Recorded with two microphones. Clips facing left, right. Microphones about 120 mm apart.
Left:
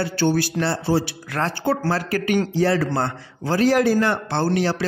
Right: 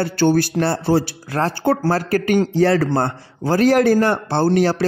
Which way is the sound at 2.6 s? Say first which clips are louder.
Right 4 dB; 55° right (ahead or behind).